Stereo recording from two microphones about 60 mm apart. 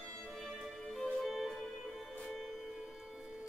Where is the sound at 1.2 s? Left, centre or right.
Centre.